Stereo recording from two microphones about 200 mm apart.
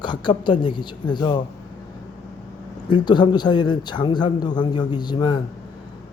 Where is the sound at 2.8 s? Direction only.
25° left (ahead or behind).